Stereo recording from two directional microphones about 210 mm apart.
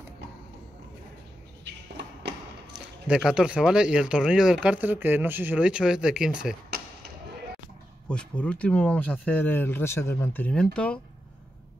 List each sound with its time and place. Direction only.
1.6 s a sound: 55° right (ahead or behind)
3.1 s speech: 5° right (ahead or behind)
8.1 s speech: 5° left (ahead or behind)